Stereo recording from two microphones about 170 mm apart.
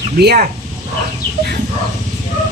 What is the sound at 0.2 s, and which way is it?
Speech, 70° right (ahead or behind).